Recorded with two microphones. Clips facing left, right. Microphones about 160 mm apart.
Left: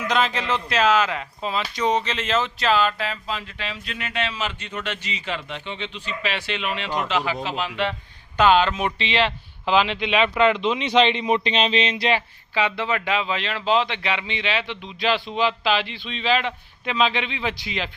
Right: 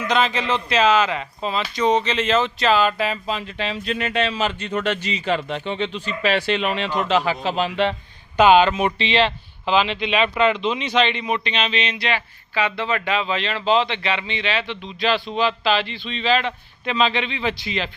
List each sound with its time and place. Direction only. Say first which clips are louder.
0.1 s speech: right 2 dB; centre (ahead or behind)
3.0 s speech: right 5 dB; 20° right (ahead or behind)
8.4 s speech: right 4 dB; 10° right (ahead or behind); by 10.2 s 15° left (ahead or behind)
10.2 s speech: left 1 dB; 5° right (ahead or behind)
10.6 s speech: left 1 dB; 15° left (ahead or behind)